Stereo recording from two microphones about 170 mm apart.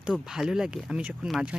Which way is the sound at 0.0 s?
5° right (ahead or behind).